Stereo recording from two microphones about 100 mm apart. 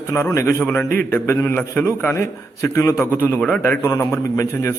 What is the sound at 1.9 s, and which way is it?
A man's voice, 30° left (ahead or behind).